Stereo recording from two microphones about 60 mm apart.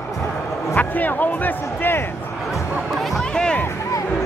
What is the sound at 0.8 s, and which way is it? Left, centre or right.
Speech, left.